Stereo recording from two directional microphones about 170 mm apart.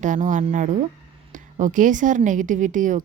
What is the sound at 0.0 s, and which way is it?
Speech, 45° right (ahead or behind).